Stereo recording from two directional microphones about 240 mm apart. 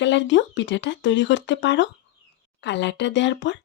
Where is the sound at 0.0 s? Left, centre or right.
Left.